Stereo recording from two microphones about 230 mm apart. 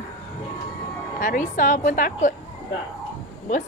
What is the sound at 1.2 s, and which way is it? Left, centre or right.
A woman's voice, left.